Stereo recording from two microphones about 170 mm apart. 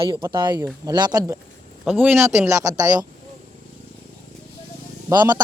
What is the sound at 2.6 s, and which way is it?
Speech, 20° right (ahead or behind).